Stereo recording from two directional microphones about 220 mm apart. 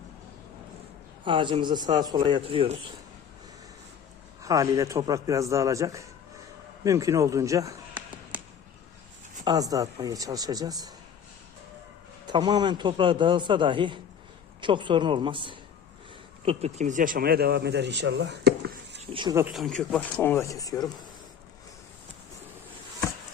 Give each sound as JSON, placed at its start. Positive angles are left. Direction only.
{"t": 1.2, "sound": "a man's voice", "side_deg": -20}
{"t": 4.4, "sound": "a man's voice", "side_deg": -15}
{"t": 9.4, "sound": "a man's voice", "side_deg": -15}
{"t": 12.3, "sound": "a man's voice", "side_deg": -20}
{"t": 19.1, "sound": "a man's voice", "side_deg": -20}
{"t": 19.5, "sound": "speech", "side_deg": 0}